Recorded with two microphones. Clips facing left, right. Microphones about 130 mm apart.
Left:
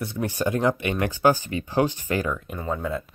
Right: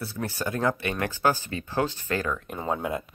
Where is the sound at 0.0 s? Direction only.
15° left (ahead or behind).